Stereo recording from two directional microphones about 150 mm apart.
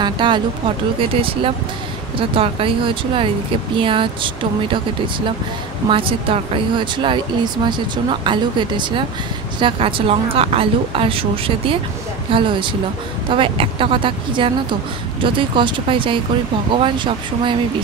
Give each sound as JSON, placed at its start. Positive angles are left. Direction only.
{"t": 0.0, "sound": "a woman's voice", "side_deg": -30}
{"t": 2.1, "sound": "a woman's voice", "side_deg": -35}